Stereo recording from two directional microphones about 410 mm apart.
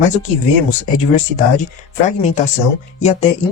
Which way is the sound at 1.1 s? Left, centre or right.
Centre.